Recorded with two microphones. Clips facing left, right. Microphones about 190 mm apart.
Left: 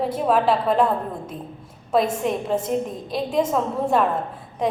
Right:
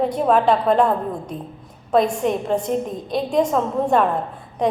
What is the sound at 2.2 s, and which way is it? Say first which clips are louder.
Speech: right 3 dB; 5° left (ahead or behind).